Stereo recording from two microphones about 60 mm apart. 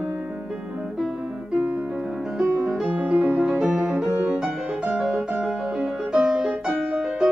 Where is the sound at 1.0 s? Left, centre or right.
Centre.